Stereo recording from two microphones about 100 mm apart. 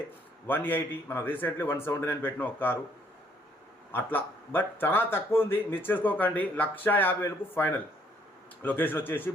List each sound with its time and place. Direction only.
0.4 s speech: 20° left (ahead or behind)
3.9 s speech: 20° left (ahead or behind)